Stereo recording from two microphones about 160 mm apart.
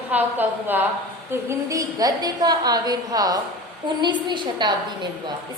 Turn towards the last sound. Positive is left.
turn(degrees=-25)  # may be behind; listen again after turning